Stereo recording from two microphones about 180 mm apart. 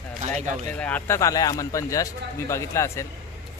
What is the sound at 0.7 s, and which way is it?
Speech, 10° left (ahead or behind).